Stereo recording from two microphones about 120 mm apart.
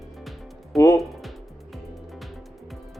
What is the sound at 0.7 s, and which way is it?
Speech, 25° left (ahead or behind).